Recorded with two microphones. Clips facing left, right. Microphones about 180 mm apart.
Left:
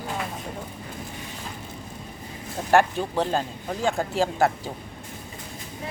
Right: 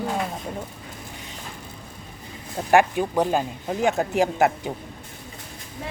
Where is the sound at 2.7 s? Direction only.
15° right (ahead or behind).